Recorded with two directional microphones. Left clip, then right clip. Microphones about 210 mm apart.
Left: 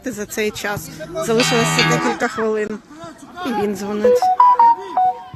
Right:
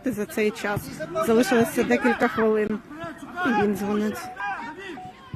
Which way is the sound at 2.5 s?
Centre (ahead or behind).